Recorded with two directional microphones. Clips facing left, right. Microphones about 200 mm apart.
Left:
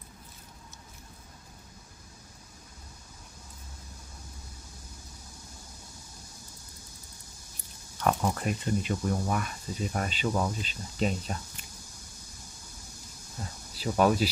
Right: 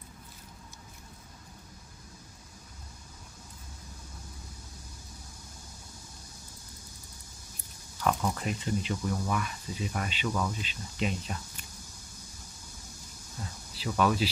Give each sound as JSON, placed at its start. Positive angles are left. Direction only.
{"t": 8.0, "sound": "speech", "side_deg": 50}
{"t": 13.7, "sound": "speech", "side_deg": 45}